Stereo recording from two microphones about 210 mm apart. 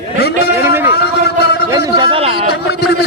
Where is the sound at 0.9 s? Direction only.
50° left (ahead or behind).